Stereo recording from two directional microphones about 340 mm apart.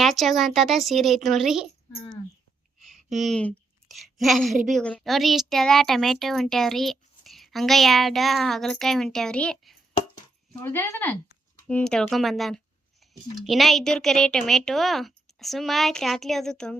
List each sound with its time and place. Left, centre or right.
0.0 s a woman's voice: centre
1.9 s speech: centre
2.8 s a woman's voice: centre